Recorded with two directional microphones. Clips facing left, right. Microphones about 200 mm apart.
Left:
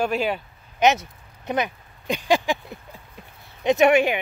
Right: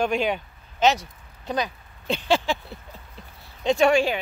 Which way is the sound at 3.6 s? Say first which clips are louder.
Left 2 dB; 20° left (ahead or behind).